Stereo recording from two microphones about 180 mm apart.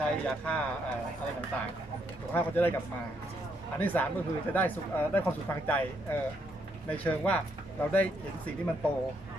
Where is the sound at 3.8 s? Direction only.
10° left (ahead or behind).